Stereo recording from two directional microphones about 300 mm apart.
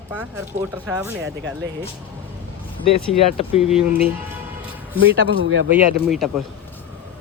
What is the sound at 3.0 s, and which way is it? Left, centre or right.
Speech, centre.